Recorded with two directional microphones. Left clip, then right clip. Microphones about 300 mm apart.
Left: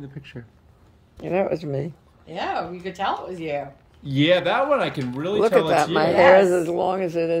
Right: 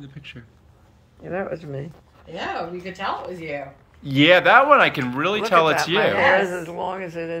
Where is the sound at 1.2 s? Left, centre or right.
Left.